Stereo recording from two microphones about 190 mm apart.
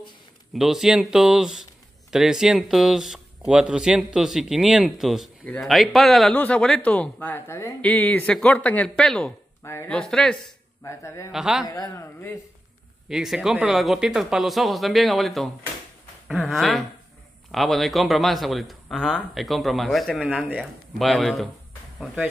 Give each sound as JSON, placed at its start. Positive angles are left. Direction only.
{"t": 0.6, "sound": "speech", "side_deg": 0}
{"t": 9.6, "sound": "speech", "side_deg": 15}
{"t": 10.8, "sound": "speech", "side_deg": 15}
{"t": 11.3, "sound": "speech", "side_deg": -5}
{"t": 11.6, "sound": "speech", "side_deg": 20}
{"t": 13.1, "sound": "speech", "side_deg": 0}